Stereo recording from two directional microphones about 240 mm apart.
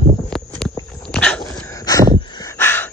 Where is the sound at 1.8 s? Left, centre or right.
Centre.